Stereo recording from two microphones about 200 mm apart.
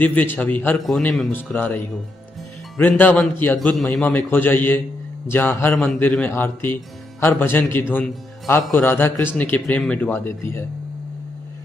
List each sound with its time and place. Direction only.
0.0 s a man's voice: 10° left (ahead or behind)